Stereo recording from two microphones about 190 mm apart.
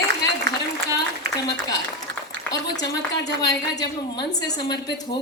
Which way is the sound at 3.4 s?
20° left (ahead or behind).